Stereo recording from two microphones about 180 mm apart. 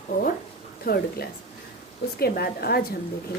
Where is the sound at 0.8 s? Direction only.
55° left (ahead or behind).